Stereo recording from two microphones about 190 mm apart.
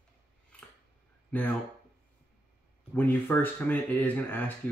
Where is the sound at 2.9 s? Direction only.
10° left (ahead or behind).